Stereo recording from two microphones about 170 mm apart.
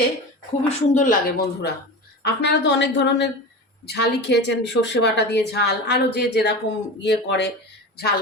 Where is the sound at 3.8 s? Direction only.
75° left (ahead or behind).